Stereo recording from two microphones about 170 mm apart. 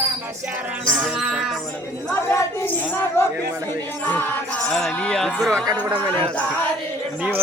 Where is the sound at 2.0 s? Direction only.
15° left (ahead or behind).